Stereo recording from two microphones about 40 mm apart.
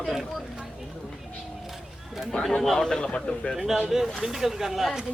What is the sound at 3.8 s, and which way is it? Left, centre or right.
Speech, centre.